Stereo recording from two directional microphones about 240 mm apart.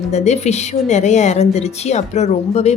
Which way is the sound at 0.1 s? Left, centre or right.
Left.